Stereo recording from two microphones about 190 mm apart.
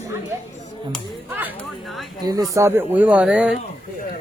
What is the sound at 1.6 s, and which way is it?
Speech, centre (ahead or behind).